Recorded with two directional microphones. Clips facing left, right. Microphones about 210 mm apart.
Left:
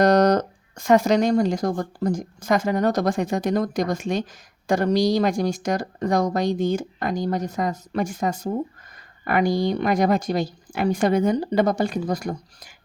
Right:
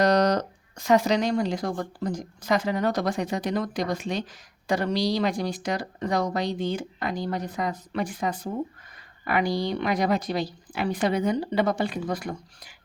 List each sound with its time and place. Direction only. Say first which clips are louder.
0.0 s speech: left 4 dB; 50° left (ahead or behind)